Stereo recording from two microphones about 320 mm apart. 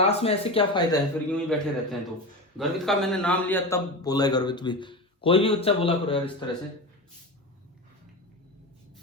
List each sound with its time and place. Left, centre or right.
0.0 s a man's voice: centre